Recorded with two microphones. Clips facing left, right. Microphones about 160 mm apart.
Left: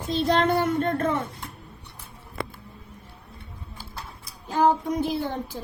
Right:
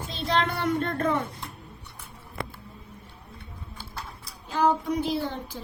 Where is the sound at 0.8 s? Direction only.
40° left (ahead or behind).